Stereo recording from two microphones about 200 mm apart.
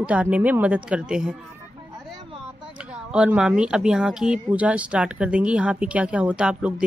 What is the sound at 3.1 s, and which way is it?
Speech, 5° right (ahead or behind).